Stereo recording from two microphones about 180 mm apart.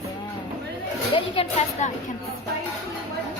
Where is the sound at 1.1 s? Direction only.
30° left (ahead or behind).